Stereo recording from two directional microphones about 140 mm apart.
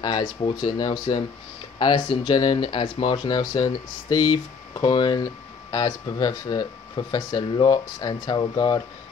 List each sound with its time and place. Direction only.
0.0 s speech: 30° left (ahead or behind)